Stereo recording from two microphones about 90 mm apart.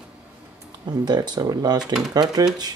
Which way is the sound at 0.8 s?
55° right (ahead or behind).